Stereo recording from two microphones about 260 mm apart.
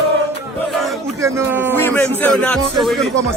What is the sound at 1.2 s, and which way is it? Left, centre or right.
Speech, centre.